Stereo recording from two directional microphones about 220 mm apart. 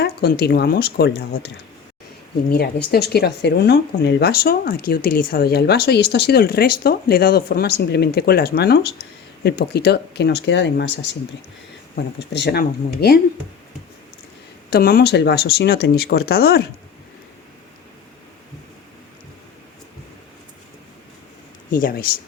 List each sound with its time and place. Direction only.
0.0 s speech: 45° left (ahead or behind)
2.5 s speech: 45° left (ahead or behind)
12.3 s speech: 50° left (ahead or behind)
14.7 s speech: 45° left (ahead or behind)
21.7 s speech: 40° left (ahead or behind)